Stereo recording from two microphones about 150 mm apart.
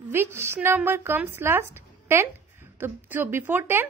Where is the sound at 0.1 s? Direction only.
15° right (ahead or behind).